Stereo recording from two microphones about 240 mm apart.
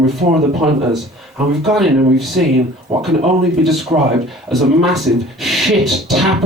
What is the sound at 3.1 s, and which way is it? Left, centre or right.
Speech, right.